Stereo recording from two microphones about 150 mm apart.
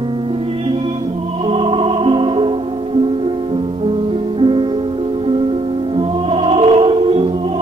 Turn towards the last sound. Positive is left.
turn(degrees=-40)  # may be behind; listen again after turning